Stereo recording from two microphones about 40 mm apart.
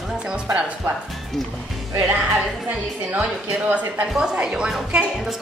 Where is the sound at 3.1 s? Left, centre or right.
Right.